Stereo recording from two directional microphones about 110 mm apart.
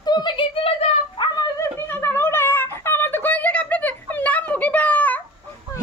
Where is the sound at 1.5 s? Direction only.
20° left (ahead or behind).